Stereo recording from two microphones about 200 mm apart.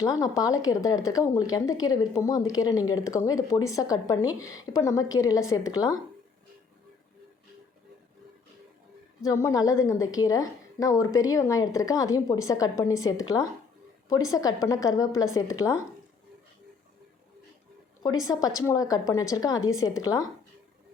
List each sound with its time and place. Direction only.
0.0 s a woman's voice: 15° left (ahead or behind)
9.2 s a woman's voice: 15° left (ahead or behind)
18.0 s a woman's voice: 15° left (ahead or behind)